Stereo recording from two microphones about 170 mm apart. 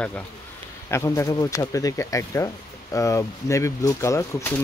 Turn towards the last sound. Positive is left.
turn(degrees=15)  # may be behind; listen again after turning